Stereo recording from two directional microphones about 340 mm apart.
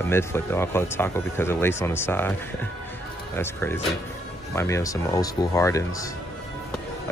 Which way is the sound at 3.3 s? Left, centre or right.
Centre.